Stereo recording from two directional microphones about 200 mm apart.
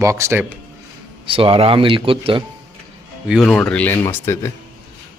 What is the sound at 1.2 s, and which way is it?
Speech, 25° right (ahead or behind).